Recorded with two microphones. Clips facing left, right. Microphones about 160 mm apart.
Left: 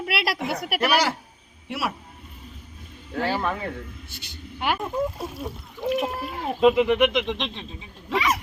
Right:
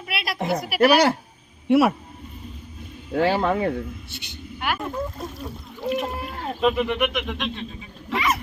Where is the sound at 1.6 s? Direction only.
55° right (ahead or behind).